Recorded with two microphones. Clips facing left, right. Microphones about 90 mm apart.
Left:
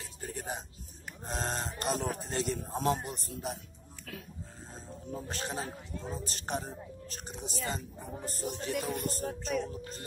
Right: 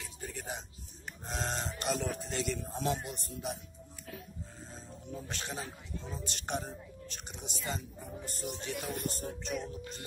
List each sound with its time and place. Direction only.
0.3 s a sound: 40° left (ahead or behind)
1.2 s speech: 40° left (ahead or behind)
5.1 s speech: 40° left (ahead or behind)
8.7 s music: centre (ahead or behind)
9.1 s speech: 40° left (ahead or behind)